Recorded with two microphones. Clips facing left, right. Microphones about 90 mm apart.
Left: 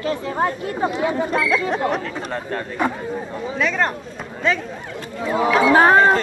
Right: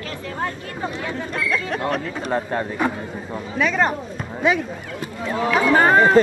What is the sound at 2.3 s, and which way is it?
Speech, 15° right (ahead or behind).